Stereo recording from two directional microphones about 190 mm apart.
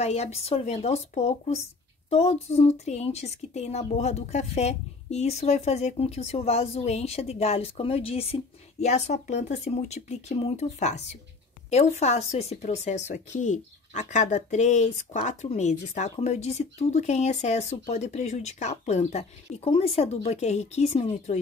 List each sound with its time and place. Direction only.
0.0 s speech: 35° left (ahead or behind)